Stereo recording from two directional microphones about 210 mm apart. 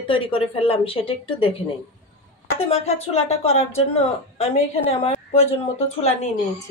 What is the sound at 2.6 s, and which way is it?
A woman's voice, 30° left (ahead or behind).